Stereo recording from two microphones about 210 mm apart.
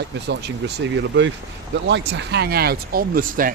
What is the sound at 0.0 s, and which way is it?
Speech, 55° right (ahead or behind).